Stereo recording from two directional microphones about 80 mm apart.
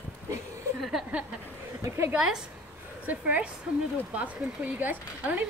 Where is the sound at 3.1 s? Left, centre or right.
Centre.